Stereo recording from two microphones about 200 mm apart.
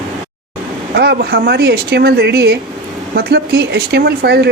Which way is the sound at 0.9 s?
50° right (ahead or behind).